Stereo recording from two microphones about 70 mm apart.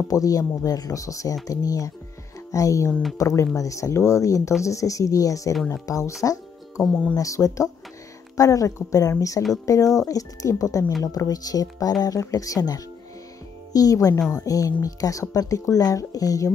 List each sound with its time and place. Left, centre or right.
0.1 s speech: left
6.8 s speech: centre
7.2 s speech: left
9.4 s speech: left
9.9 s speech: left